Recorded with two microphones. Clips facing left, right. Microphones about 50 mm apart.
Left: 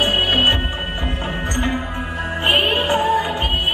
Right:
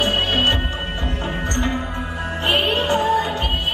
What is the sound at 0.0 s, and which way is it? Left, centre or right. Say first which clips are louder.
Music: left 2 dB; centre.